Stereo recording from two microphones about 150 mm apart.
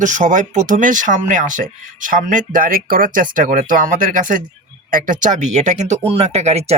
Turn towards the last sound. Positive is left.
turn(degrees=-45)  # may be behind; listen again after turning